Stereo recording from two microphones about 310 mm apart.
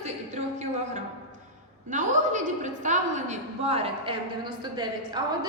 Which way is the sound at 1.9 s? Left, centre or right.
Right.